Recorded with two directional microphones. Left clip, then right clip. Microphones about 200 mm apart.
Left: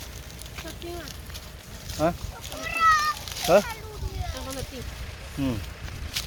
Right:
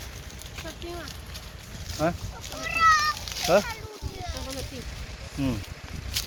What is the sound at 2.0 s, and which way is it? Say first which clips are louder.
Speech: left 2 dB; 10° left (ahead or behind).